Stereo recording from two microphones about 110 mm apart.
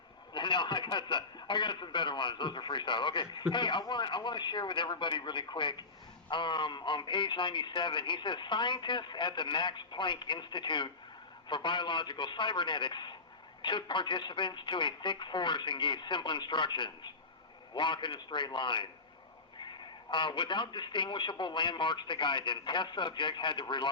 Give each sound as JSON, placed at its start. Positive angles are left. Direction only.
{"t": 0.3, "sound": "a man's voice", "side_deg": 45}